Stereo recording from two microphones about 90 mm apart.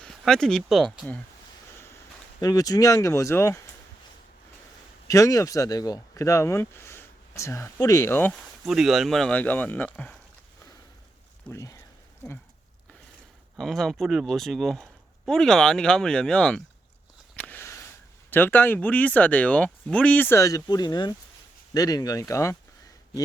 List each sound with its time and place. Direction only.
0.0 s speech: 5° left (ahead or behind)
2.4 s speech: 40° left (ahead or behind)
5.0 s speech: 35° left (ahead or behind)
8.6 s speech: 5° right (ahead or behind)
9.3 s speech: 20° left (ahead or behind)
11.5 s speech: 40° left (ahead or behind)
13.6 s speech: 5° left (ahead or behind)
17.3 s a sound: 15° left (ahead or behind)
18.3 s speech: 20° left (ahead or behind)
20.4 s speech: 40° left (ahead or behind)